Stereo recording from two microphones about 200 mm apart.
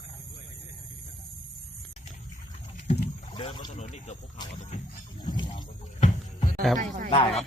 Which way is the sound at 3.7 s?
35° left (ahead or behind).